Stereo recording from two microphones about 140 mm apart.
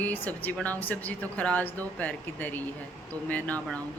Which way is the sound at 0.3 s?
10° left (ahead or behind).